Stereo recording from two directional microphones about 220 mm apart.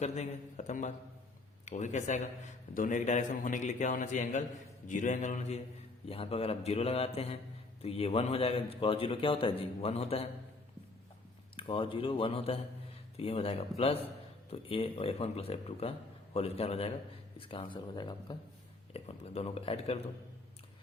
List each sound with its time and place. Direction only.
0.0 s a man's voice: 30° left (ahead or behind)
11.5 s a man's voice: 20° left (ahead or behind)